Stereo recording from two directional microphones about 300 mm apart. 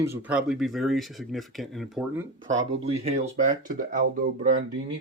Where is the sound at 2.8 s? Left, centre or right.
Right.